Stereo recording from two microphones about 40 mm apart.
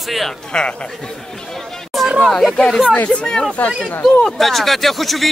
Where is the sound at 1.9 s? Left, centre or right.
Centre.